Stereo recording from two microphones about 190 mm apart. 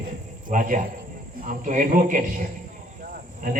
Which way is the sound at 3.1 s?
45° right (ahead or behind).